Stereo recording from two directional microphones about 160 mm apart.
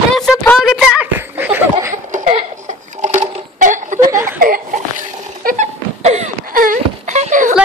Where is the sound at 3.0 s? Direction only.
45° right (ahead or behind).